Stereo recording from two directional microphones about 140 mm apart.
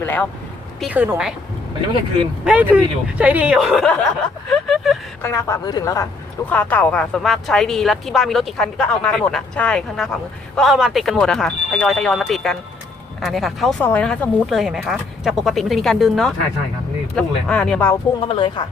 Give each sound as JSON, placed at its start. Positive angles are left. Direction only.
{"t": 0.0, "sound": "speech", "side_deg": 15}
{"t": 0.8, "sound": "speech", "side_deg": -10}
{"t": 2.4, "sound": "speech", "side_deg": -10}
{"t": 5.2, "sound": "speech", "side_deg": 20}
{"t": 6.5, "sound": "speech", "side_deg": 10}
{"t": 18.3, "sound": "speech", "side_deg": 35}